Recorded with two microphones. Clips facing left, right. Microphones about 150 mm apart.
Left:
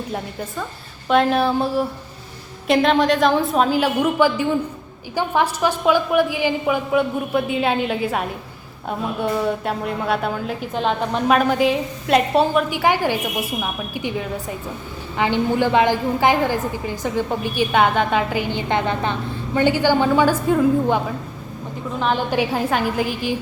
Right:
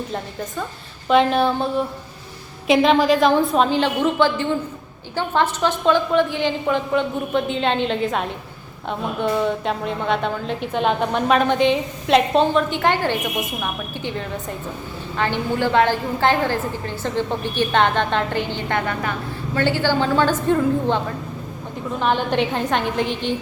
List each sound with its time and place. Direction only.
1.0 s a woman's voice: centre (ahead or behind)
18.7 s a woman's voice: 20° left (ahead or behind)
22.0 s a woman's voice: 5° left (ahead or behind)